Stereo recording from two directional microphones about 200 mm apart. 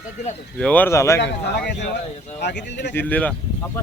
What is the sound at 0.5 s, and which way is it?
Speech, 5° left (ahead or behind).